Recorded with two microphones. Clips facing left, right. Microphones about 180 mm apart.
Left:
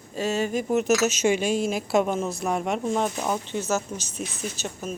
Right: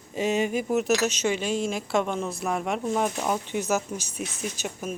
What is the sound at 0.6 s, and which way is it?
A woman's voice, centre (ahead or behind).